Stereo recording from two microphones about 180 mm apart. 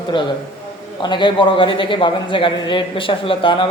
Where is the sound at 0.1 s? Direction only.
25° left (ahead or behind).